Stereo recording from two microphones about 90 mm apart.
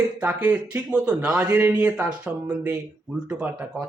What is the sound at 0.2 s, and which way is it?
Speech, 15° right (ahead or behind).